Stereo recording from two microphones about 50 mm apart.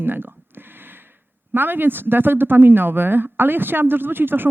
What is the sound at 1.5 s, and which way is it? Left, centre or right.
Speech, right.